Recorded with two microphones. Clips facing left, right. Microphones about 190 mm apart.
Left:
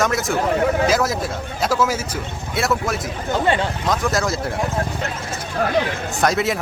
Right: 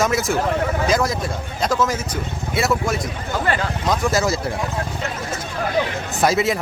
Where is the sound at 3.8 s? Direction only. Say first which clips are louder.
Right 3 dB; centre (ahead or behind).